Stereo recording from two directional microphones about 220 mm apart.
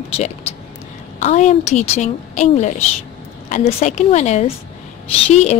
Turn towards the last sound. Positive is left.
turn(degrees=30)  # may be behind; listen again after turning